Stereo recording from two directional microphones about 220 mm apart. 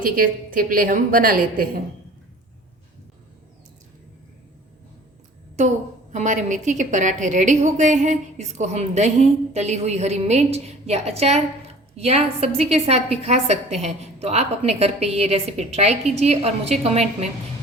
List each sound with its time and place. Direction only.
0.0 s a woman's voice: 40° right (ahead or behind)
5.5 s a woman's voice: 35° right (ahead or behind)